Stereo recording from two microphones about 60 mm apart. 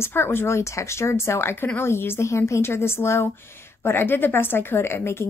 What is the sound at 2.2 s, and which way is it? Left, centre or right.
A woman's voice, left.